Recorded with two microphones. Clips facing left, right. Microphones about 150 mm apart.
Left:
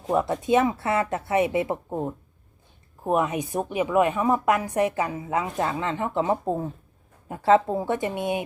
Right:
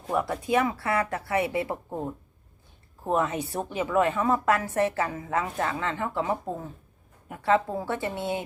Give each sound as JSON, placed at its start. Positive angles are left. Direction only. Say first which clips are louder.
{"t": 0.1, "sound": "a woman's voice", "louder": "left 4 dB", "side_deg": 20}